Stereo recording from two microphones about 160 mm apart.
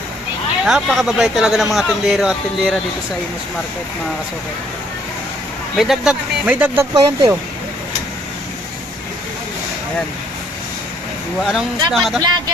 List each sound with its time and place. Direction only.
0.6 s speech: centre (ahead or behind)
5.7 s speech: centre (ahead or behind)
6.9 s speech: 25° right (ahead or behind)
11.4 s speech: centre (ahead or behind)